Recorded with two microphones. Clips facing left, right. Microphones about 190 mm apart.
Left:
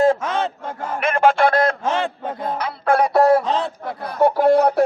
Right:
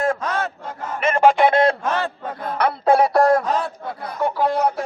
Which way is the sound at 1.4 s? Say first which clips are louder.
Right 1 dB; 25° right (ahead or behind).